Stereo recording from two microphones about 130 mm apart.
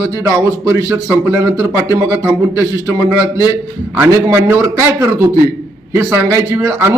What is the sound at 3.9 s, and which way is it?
Speech, 15° right (ahead or behind).